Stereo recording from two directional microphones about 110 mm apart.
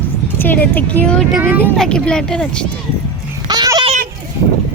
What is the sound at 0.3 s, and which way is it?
Speech, 15° left (ahead or behind).